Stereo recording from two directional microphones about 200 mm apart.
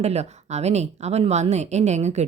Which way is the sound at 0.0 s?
35° right (ahead or behind).